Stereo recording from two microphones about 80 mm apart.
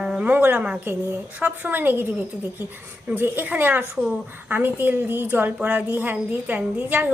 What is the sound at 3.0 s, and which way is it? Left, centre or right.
A woman's voice, right.